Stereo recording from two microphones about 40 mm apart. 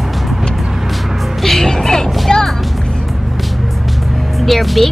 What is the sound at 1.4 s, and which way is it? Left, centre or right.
Music, centre.